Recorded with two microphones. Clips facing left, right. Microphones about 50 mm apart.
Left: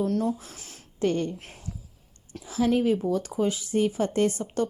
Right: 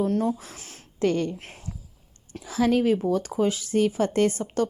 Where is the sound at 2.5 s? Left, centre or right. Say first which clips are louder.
Right 2 dB; right.